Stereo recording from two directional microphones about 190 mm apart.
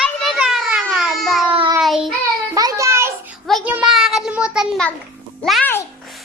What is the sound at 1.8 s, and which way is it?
Speech, centre (ahead or behind).